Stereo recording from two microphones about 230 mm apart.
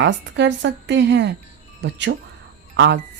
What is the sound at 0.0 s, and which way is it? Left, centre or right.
Speech, right.